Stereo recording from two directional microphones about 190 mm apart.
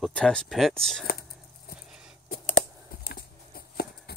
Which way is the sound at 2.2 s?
45° left (ahead or behind).